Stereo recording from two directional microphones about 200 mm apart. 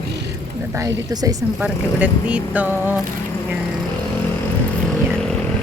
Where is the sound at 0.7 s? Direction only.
15° right (ahead or behind).